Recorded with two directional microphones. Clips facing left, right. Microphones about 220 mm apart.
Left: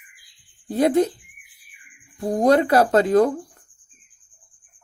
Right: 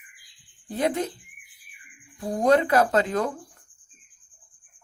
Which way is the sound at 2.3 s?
40° left (ahead or behind).